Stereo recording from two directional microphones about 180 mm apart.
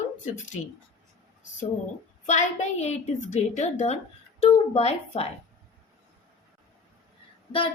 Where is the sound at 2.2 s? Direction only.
40° left (ahead or behind).